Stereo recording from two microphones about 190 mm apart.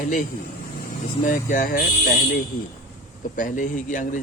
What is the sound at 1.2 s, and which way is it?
Speech, 45° left (ahead or behind).